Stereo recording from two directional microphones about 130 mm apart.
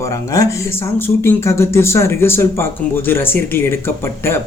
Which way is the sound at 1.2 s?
20° left (ahead or behind).